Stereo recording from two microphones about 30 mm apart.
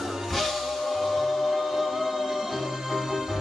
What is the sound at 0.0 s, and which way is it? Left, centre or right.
Music, centre.